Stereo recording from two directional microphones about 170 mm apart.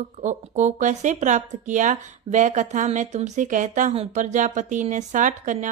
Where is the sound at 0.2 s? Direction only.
45° right (ahead or behind).